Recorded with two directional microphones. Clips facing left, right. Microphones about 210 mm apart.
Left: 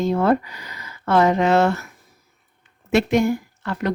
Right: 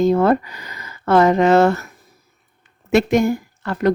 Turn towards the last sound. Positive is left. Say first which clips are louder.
# right 4 dB
turn(degrees=-45)  # may be behind; listen again after turning